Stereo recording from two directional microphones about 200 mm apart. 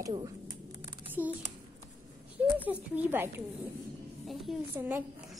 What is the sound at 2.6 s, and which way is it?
Speech, 10° right (ahead or behind).